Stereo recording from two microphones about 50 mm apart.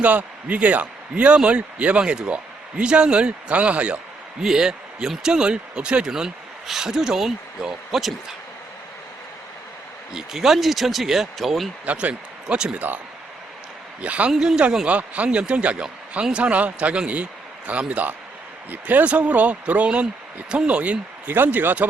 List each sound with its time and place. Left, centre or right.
0.0 s a man's voice: right
4.4 s speech: centre
10.2 s speech: centre
11.9 s speech: right
12.7 s speech: right
14.0 s a man's voice: right
14.3 s a man's voice: centre
21.3 s speech: right